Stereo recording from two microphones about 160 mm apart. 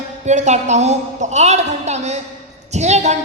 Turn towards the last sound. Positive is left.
turn(degrees=-45)  # may be behind; listen again after turning